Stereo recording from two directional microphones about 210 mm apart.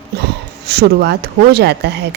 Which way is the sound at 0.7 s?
50° right (ahead or behind).